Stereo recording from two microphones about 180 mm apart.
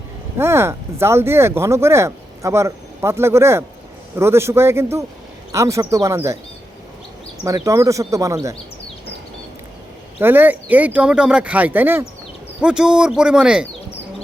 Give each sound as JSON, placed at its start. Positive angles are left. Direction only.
{"t": 0.3, "sound": "speech", "side_deg": -15}
{"t": 7.4, "sound": "speech", "side_deg": -15}
{"t": 10.2, "sound": "speech", "side_deg": -10}